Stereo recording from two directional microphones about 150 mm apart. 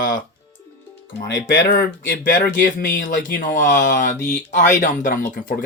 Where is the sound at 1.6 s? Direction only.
85° left.